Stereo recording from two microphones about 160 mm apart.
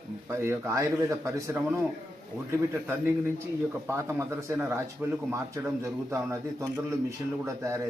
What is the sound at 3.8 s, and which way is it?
A man's voice, 15° right (ahead or behind).